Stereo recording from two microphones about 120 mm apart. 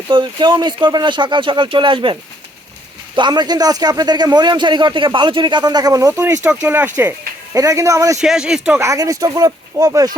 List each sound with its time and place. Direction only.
0.1 s speech: 40° right (ahead or behind)
3.2 s speech: 40° right (ahead or behind); by 7.1 s 15° right (ahead or behind)
7.5 s speech: 25° right (ahead or behind)
8.2 s speech: 5° right (ahead or behind)
8.8 s speech: 25° right (ahead or behind)